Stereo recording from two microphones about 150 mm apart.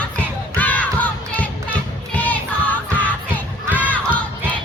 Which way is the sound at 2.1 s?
10° left (ahead or behind).